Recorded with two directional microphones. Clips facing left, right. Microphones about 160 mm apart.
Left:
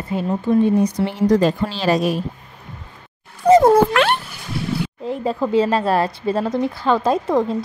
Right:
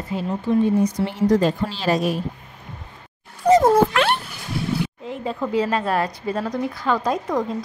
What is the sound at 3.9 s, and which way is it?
Cat, 70° left (ahead or behind).